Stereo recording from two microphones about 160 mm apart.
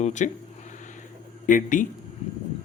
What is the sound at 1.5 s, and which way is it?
Speech, 55° left (ahead or behind).